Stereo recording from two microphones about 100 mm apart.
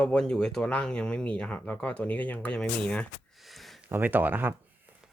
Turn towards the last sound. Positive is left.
turn(degrees=-20)  # may be behind; listen again after turning